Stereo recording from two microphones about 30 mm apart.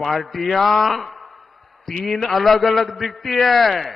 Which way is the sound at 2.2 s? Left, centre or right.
Centre.